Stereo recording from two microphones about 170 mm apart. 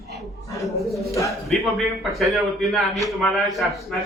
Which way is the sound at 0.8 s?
20° left (ahead or behind).